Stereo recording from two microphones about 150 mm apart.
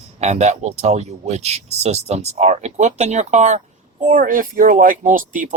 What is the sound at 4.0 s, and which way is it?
Speech, 65° right (ahead or behind).